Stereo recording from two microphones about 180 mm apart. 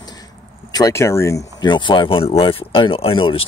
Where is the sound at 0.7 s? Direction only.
20° left (ahead or behind).